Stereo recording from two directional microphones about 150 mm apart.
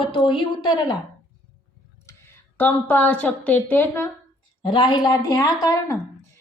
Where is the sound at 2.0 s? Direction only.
15° left (ahead or behind).